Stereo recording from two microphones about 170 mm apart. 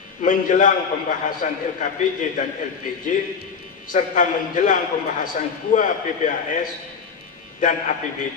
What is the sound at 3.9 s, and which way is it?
A man's voice, 50° left (ahead or behind).